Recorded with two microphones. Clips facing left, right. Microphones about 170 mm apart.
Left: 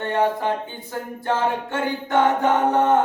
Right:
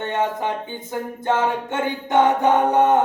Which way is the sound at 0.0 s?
20° right (ahead or behind).